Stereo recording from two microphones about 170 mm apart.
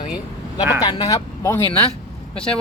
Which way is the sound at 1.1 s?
15° left (ahead or behind).